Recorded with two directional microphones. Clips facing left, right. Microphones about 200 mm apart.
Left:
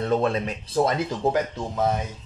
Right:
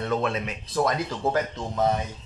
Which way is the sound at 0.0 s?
35° left (ahead or behind).